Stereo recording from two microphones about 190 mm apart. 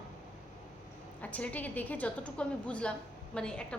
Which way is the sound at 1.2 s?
5° left (ahead or behind).